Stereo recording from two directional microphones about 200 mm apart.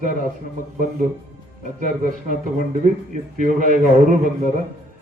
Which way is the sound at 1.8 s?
40° right (ahead or behind).